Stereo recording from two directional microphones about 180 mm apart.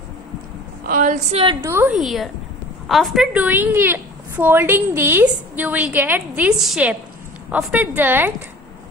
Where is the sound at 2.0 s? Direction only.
Centre (ahead or behind).